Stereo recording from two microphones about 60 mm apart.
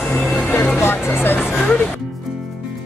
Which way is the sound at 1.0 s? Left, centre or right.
Left.